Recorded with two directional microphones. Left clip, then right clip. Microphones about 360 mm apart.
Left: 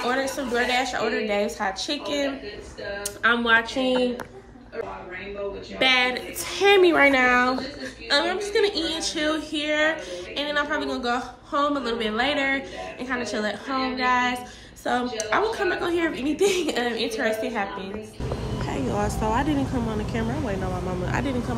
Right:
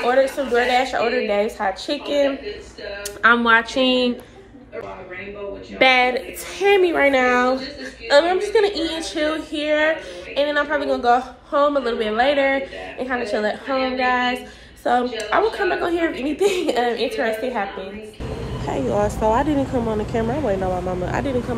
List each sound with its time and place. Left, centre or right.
0.0 s a woman's voice: centre
3.2 s speech: centre
5.8 s speech: centre
6.6 s a woman's voice: centre